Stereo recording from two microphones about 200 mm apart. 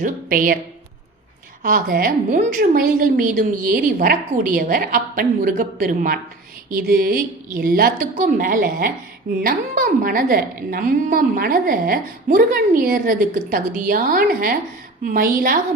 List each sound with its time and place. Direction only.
0.0 s a woman's voice: 45° right (ahead or behind)
1.6 s a woman's voice: 45° right (ahead or behind)